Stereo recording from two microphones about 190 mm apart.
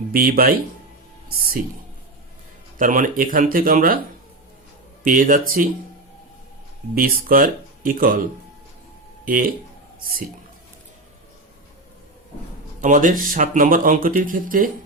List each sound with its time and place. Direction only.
0.1 s speech: 50° right (ahead or behind)
2.7 s speech: 45° right (ahead or behind)
5.0 s speech: 45° right (ahead or behind)
6.9 s speech: 50° right (ahead or behind)
9.2 s speech: 45° right (ahead or behind)
12.8 s speech: 45° right (ahead or behind)